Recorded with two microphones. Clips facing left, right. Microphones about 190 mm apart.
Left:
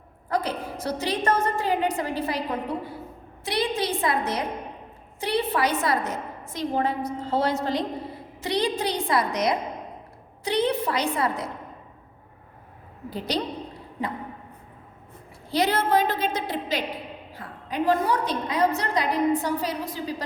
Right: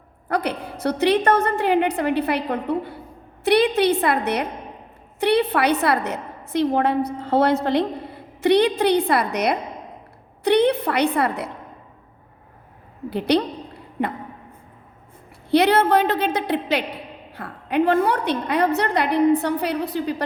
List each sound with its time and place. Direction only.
0.3 s a woman's voice: 65° right (ahead or behind)
13.1 s a woman's voice: 65° right (ahead or behind)
15.4 s a woman's voice: 65° right (ahead or behind)